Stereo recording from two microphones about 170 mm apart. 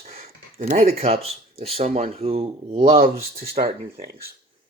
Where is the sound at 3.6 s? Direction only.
60° right (ahead or behind).